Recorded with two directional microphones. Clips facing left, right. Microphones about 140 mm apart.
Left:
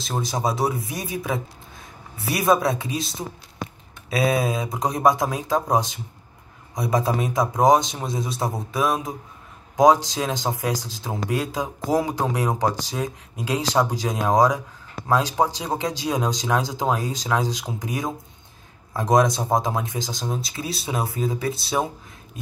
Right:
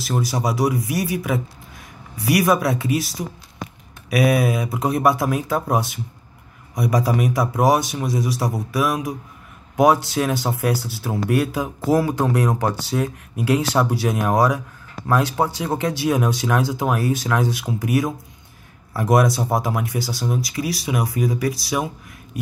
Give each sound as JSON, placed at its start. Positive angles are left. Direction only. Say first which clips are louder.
{"t": 0.0, "sound": "speech", "louder": "right 2 dB", "side_deg": 20}
{"t": 10.1, "sound": "speech", "louder": "right 4 dB", "side_deg": 15}